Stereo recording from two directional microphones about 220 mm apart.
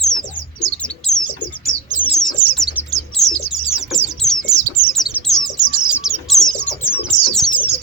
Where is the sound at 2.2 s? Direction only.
Centre (ahead or behind).